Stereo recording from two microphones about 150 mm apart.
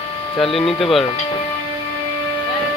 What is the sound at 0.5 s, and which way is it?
Speech, centre (ahead or behind).